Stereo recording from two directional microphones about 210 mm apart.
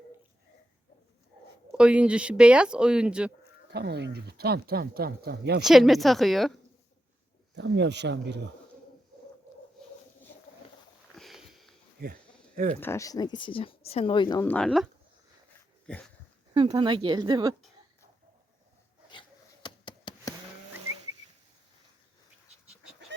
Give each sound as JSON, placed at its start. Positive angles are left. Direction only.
{"t": 1.7, "sound": "speech", "side_deg": -5}
{"t": 3.7, "sound": "speech", "side_deg": -50}
{"t": 5.6, "sound": "speech", "side_deg": 0}
{"t": 7.5, "sound": "speech", "side_deg": -55}
{"t": 11.1, "sound": "sniff", "side_deg": 0}
{"t": 12.5, "sound": "speech", "side_deg": -40}
{"t": 12.8, "sound": "speech", "side_deg": 15}
{"t": 14.4, "sound": "speech", "side_deg": 5}
{"t": 15.9, "sound": "speech", "side_deg": 5}
{"t": 16.6, "sound": "speech", "side_deg": -20}
{"t": 19.6, "sound": "a sound", "side_deg": 20}
{"t": 22.6, "sound": "goat", "side_deg": -5}